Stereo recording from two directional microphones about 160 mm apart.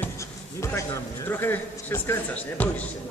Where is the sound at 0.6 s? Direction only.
15° left (ahead or behind).